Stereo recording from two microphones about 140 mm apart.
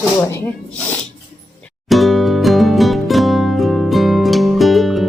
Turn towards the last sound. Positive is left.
turn(degrees=0)  # may be behind; listen again after turning